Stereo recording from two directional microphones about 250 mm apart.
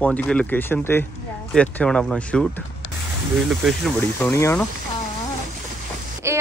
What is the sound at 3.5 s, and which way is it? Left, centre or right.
Speech, centre.